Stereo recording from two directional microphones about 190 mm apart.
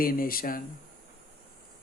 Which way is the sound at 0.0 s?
50° left (ahead or behind).